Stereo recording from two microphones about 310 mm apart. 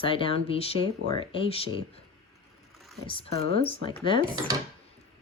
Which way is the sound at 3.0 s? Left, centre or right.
Centre.